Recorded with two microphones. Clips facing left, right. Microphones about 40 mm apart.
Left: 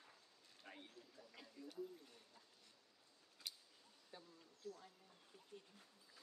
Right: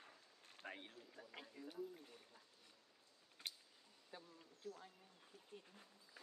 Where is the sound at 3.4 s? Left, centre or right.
Right.